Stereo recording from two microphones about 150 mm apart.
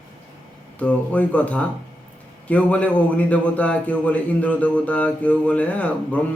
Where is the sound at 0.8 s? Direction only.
10° left (ahead or behind).